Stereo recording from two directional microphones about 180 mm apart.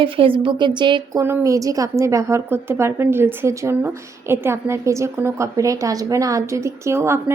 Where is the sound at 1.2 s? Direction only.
15° right (ahead or behind).